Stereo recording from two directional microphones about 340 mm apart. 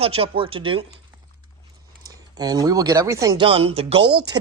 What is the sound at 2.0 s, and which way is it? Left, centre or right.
Speech, centre.